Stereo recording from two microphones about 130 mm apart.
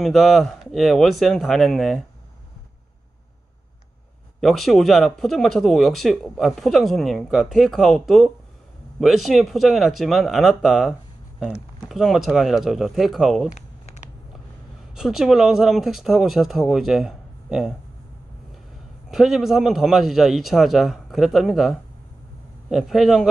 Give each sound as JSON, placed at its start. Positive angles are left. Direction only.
{"t": 0.0, "sound": "speech", "side_deg": 0}
{"t": 4.4, "sound": "speech", "side_deg": 0}
{"t": 15.0, "sound": "speech", "side_deg": -5}
{"t": 19.0, "sound": "speech", "side_deg": -5}